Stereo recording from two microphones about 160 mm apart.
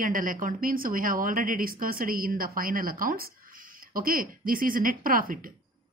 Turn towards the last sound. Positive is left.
turn(degrees=-60)  # may be behind; listen again after turning